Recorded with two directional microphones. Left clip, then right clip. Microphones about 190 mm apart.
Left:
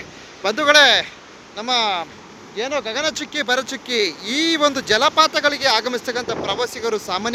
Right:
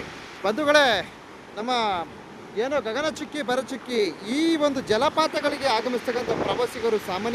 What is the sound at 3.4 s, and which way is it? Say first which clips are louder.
Speech: left 5 dB; 5° right (ahead or behind).